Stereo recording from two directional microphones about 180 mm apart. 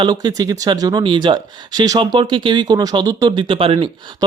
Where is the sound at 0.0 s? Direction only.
20° right (ahead or behind).